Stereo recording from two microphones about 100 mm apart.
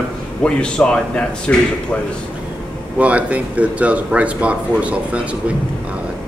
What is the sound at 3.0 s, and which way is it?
Speech, 15° right (ahead or behind).